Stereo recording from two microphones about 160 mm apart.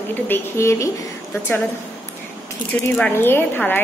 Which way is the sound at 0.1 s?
15° left (ahead or behind).